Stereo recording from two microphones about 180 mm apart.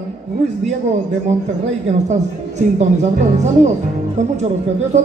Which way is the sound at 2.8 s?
40° right (ahead or behind).